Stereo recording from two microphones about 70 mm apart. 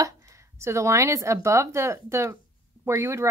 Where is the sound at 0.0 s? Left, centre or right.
Right.